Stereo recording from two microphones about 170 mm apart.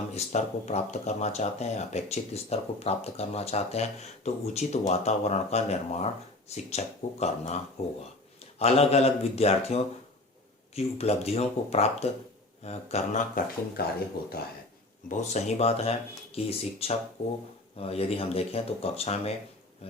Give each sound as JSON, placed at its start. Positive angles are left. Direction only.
{"t": 0.1, "sound": "speech", "side_deg": 40}
{"t": 13.8, "sound": "speech", "side_deg": 65}
{"t": 15.1, "sound": "speech", "side_deg": 40}